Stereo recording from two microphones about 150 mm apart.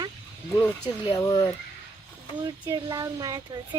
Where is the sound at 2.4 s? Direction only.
25° right (ahead or behind).